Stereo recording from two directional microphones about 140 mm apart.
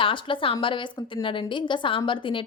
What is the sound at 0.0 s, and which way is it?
Speech, 40° left (ahead or behind).